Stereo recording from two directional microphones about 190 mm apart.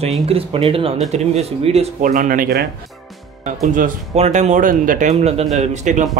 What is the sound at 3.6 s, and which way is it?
Speech, 45° right (ahead or behind).